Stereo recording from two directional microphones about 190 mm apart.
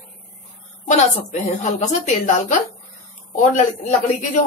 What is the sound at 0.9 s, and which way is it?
A woman's voice, 40° left (ahead or behind).